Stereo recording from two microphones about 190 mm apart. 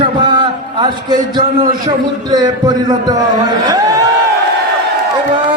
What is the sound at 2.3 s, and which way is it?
A man's voice, 20° right (ahead or behind).